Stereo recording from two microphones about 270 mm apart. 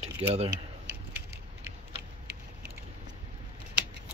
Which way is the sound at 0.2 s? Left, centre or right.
Right.